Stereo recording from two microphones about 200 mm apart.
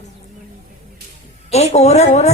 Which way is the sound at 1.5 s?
35° left (ahead or behind).